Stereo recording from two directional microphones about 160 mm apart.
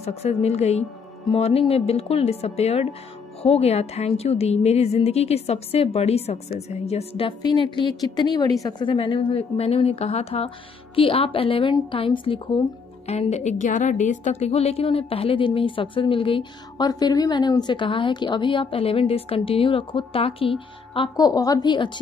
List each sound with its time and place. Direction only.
0.0 s a woman's voice: 40° left (ahead or behind)